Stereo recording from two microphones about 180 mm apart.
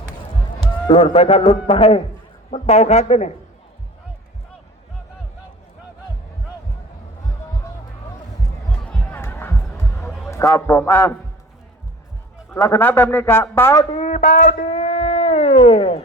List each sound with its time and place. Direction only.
0.9 s a man's voice: 30° left (ahead or behind)
8.8 s a sound: 5° left (ahead or behind)
9.7 s heart sounds: 15° left (ahead or behind)
10.2 s a man's voice: 15° left (ahead or behind)
12.5 s a man's voice: 15° left (ahead or behind)
13.9 s a man's voice: 35° left (ahead or behind)
14.3 s a sound: 35° left (ahead or behind)